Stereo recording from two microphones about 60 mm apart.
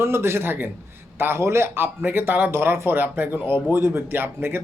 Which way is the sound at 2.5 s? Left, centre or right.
Right.